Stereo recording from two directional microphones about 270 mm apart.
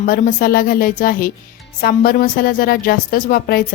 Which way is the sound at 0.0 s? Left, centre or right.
Left.